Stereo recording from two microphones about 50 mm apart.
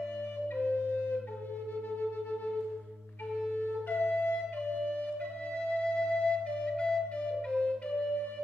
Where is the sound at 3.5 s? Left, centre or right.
Left.